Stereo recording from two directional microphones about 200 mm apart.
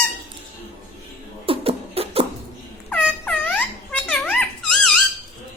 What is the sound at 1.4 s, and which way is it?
Beatboxing, 30° right (ahead or behind).